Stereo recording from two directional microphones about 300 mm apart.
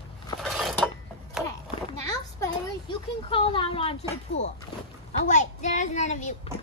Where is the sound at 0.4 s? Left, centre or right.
Centre.